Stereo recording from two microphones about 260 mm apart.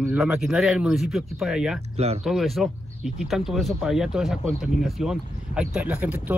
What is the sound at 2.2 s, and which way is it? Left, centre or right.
Speech, centre.